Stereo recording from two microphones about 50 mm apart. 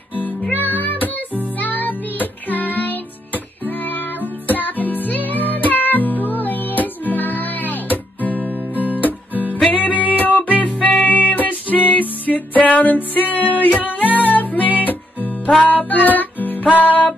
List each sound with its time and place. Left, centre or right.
0.1 s music: left